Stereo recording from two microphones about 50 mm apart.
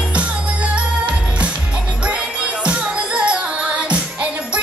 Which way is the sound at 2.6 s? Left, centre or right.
Right.